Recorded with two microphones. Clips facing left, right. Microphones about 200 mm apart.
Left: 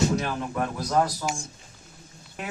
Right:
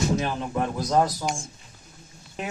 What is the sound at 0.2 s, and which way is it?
Speech, 25° right (ahead or behind).